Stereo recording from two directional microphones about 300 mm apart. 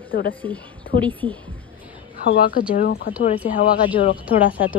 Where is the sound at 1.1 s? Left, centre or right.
Centre.